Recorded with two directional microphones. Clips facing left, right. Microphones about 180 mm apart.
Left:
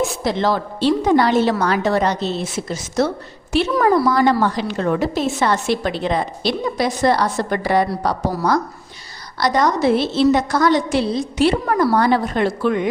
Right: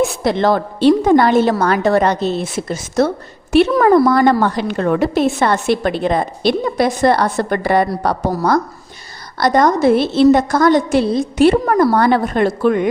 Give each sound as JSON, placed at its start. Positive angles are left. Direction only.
{"t": 0.3, "sound": "a woman's voice", "side_deg": -55}